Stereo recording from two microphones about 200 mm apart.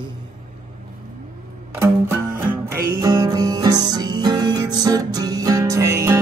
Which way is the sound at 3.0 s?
20° right (ahead or behind).